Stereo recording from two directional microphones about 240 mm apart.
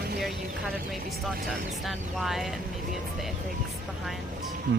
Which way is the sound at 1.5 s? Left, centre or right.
Centre.